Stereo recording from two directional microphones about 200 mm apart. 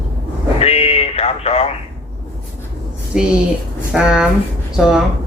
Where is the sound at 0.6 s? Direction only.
30° left (ahead or behind).